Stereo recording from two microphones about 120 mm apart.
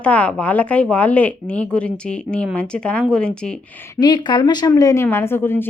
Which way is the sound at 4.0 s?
40° left (ahead or behind).